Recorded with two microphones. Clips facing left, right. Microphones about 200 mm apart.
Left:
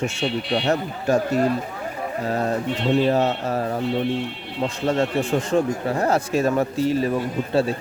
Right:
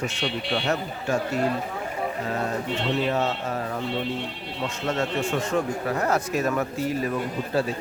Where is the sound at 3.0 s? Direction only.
35° left (ahead or behind).